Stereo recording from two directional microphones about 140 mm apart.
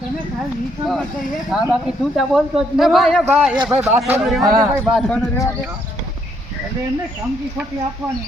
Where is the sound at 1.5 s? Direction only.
5° right (ahead or behind).